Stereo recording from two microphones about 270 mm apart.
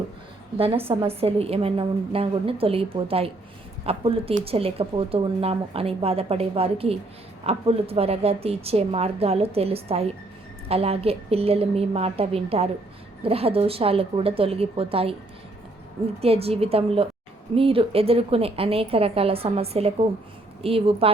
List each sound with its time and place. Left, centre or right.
0.5 s speech: right
16.2 s speech: right